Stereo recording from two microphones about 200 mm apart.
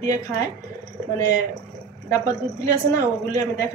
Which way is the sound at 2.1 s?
15° left (ahead or behind).